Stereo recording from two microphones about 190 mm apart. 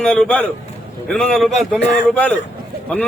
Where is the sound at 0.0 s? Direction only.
5° left (ahead or behind).